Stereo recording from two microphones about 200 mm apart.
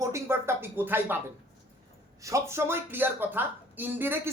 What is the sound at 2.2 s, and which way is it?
A woman's voice, 15° right (ahead or behind).